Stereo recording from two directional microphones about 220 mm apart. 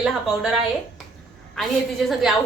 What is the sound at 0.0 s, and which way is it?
A woman's voice, centre (ahead or behind).